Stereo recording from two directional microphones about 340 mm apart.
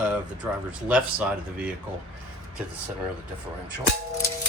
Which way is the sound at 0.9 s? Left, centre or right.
Centre.